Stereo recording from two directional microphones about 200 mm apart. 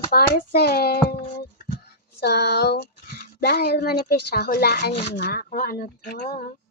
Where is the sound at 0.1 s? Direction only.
50° left (ahead or behind).